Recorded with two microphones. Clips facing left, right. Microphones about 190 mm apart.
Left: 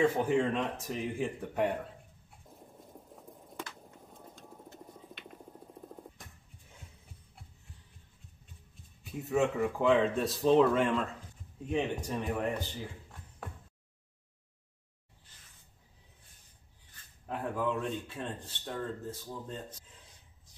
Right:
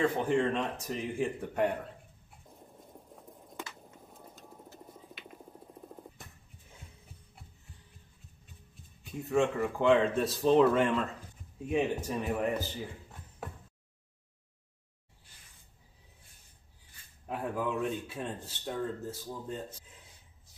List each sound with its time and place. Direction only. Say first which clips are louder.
0.0 s speech: left 1 dB; 5° left (ahead or behind)
2.4 s a sound: left 1 dB; centre (ahead or behind)
9.0 s speech: right 1 dB; centre (ahead or behind)
16.9 s speech: right 1 dB; 10° right (ahead or behind)